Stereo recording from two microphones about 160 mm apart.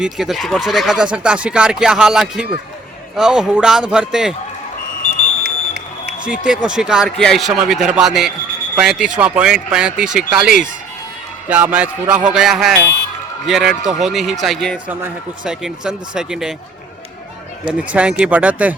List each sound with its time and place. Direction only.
0.0 s speech: centre (ahead or behind)
5.4 s music: 90° right
6.2 s speech: 5° right (ahead or behind)
17.7 s speech: 10° right (ahead or behind)